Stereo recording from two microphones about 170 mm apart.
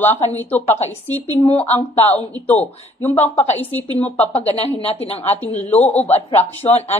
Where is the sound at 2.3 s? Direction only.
10° left (ahead or behind).